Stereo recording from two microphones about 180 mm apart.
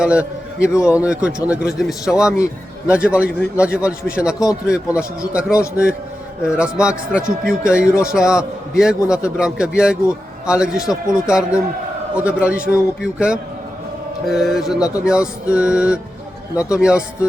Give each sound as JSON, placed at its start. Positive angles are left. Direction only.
{"t": 0.0, "sound": "a man's voice", "side_deg": -5}
{"t": 0.7, "sound": "a man's voice", "side_deg": 15}
{"t": 0.9, "sound": "a man's voice", "side_deg": -5}